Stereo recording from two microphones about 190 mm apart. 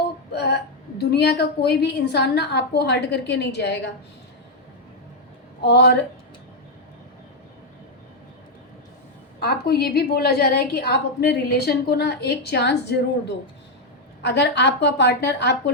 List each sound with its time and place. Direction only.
0.3 s a woman's voice: 60° left (ahead or behind)
5.6 s a woman's voice: 60° left (ahead or behind)
9.4 s a woman's voice: 55° left (ahead or behind)